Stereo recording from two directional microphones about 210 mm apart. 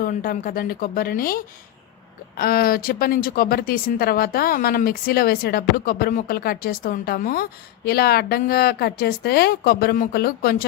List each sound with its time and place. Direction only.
0.0 s speech: 45° left (ahead or behind)